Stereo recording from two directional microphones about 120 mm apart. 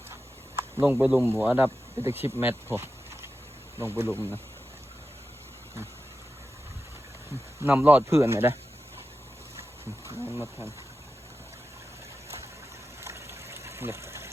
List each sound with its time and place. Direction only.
0.1 s a sound: 20° right (ahead or behind)
1.3 s speech: 15° right (ahead or behind)
7.6 s speech: 15° right (ahead or behind)
10.1 s speech: 20° right (ahead or behind)
13.0 s trickle: 25° right (ahead or behind)